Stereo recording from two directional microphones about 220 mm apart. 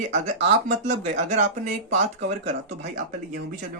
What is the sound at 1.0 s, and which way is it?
Speech, 30° right (ahead or behind).